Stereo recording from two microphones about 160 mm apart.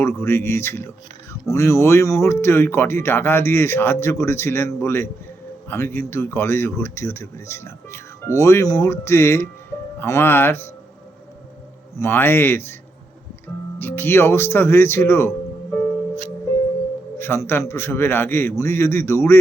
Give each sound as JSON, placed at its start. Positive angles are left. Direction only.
{"t": 0.2, "sound": "speech", "side_deg": 15}
{"t": 11.9, "sound": "speech", "side_deg": 15}
{"t": 13.7, "sound": "speech", "side_deg": 15}
{"t": 17.2, "sound": "speech", "side_deg": 15}